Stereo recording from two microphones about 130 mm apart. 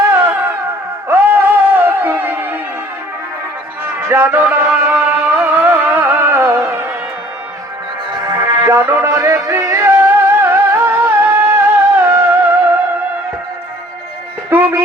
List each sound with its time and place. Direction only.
0.1 s music: 20° right (ahead or behind)
4.0 s music: 20° right (ahead or behind)
8.1 s music: 30° right (ahead or behind)
14.5 s music: 15° right (ahead or behind)